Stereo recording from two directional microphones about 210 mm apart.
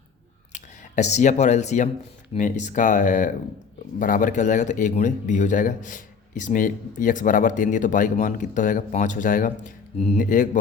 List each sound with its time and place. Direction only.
0.5 s speech: 35° left (ahead or behind)